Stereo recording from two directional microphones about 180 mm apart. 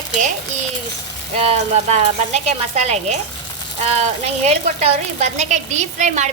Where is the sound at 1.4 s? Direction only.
40° right (ahead or behind).